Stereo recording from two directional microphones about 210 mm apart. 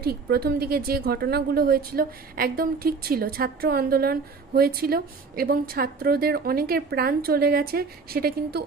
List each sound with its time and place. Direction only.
0.0 s a woman's voice: 50° right (ahead or behind)